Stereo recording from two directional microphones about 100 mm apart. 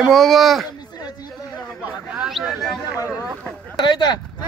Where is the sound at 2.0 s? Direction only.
5° right (ahead or behind).